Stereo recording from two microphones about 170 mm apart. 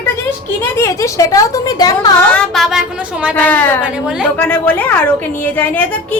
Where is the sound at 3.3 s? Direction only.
10° left (ahead or behind).